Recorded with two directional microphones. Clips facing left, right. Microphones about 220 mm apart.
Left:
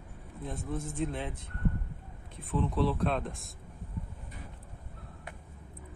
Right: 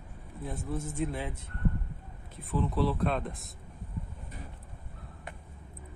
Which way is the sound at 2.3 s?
Centre (ahead or behind).